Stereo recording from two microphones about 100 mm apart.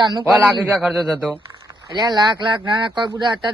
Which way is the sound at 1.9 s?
45° right (ahead or behind).